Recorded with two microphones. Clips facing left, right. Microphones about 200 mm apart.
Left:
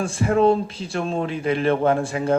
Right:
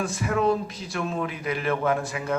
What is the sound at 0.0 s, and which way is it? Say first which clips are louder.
A man's voice: left 6 dB; 30° left (ahead or behind).